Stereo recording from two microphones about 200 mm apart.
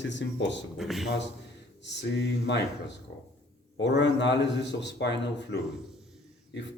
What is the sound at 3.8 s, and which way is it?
Speech, 60° left (ahead or behind).